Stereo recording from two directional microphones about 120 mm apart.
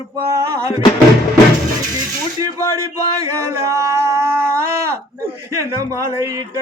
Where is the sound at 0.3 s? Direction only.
20° right (ahead or behind).